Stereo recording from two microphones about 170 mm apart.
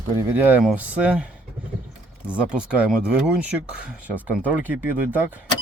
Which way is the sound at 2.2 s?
5° right (ahead or behind).